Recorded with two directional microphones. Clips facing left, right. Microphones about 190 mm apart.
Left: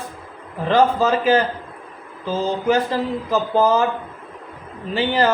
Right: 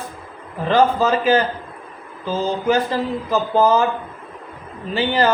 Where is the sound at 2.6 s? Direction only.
60° left (ahead or behind).